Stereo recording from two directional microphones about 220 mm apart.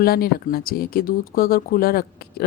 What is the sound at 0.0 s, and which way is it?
Speech, 45° left (ahead or behind).